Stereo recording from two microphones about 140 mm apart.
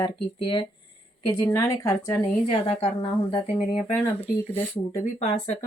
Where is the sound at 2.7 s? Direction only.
45° left (ahead or behind).